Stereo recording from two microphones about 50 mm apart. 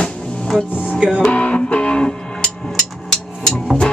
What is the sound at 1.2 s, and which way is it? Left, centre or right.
Music, left.